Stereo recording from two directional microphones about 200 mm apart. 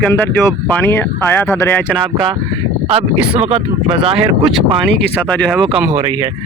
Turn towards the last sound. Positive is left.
turn(degrees=5)  # may be behind; listen again after turning